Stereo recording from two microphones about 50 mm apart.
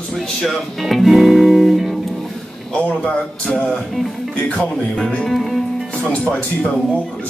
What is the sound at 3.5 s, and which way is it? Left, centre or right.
Music, centre.